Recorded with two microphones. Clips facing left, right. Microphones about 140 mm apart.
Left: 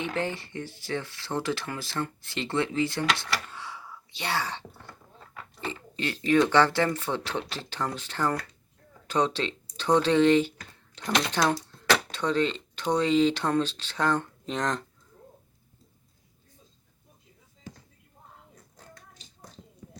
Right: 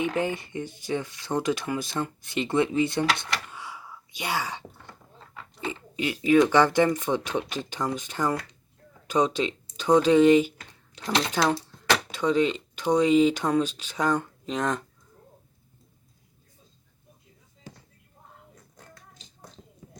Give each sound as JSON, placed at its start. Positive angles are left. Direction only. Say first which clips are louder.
{"t": 0.0, "sound": "speech", "louder": "right 4 dB", "side_deg": -15}